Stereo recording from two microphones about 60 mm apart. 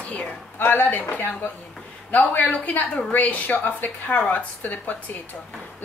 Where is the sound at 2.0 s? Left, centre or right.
Left.